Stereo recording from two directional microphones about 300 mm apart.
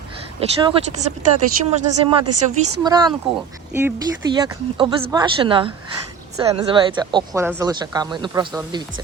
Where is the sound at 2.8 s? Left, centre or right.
Centre.